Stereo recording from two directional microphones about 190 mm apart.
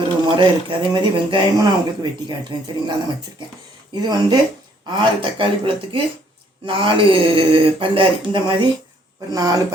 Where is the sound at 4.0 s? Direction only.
20° right (ahead or behind).